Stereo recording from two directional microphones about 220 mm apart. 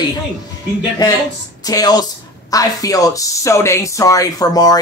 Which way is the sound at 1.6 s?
15° left (ahead or behind).